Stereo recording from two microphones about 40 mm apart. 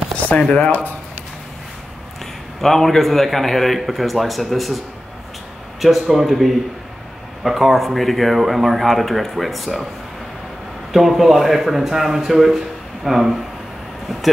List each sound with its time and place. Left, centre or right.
0.4 s speech: left
2.6 s speech: centre
10.9 s a man's voice: centre